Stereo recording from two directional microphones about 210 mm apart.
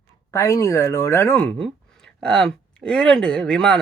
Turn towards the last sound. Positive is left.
turn(degrees=5)  # may be behind; listen again after turning